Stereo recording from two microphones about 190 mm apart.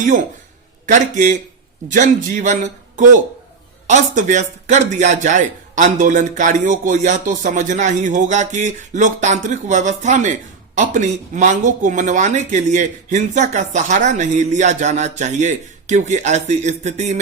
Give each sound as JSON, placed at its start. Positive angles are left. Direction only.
{"t": 0.9, "sound": "a man's voice", "side_deg": -40}